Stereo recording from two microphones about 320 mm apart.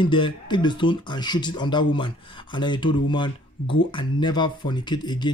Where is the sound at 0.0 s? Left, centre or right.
Centre.